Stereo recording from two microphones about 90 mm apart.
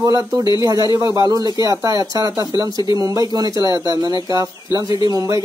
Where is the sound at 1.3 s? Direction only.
45° right (ahead or behind).